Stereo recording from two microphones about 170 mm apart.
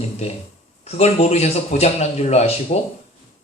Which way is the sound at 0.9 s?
40° left (ahead or behind).